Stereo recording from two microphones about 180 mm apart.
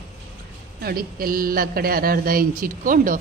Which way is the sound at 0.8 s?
55° right (ahead or behind).